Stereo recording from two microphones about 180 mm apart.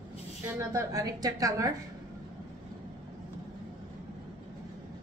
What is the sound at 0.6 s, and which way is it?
A woman's voice, 20° right (ahead or behind).